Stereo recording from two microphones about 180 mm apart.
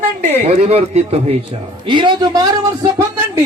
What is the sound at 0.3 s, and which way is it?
Speech, 35° right (ahead or behind).